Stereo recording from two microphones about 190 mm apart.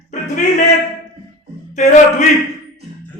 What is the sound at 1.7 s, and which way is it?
Speech, 35° left (ahead or behind).